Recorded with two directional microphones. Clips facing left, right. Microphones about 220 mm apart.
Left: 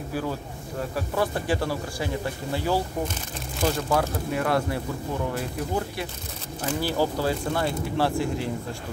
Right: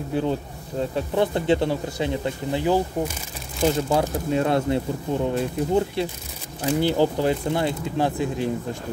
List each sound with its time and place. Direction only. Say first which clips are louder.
0.1 s speech: right 6 dB; 25° right (ahead or behind)